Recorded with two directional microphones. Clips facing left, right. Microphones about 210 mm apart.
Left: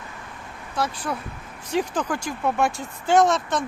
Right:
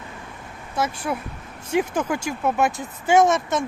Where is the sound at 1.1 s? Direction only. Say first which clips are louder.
Right 2 dB; 10° right (ahead or behind).